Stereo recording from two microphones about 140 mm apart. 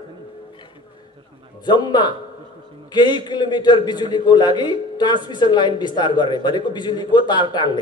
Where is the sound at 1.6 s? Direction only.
30° left (ahead or behind).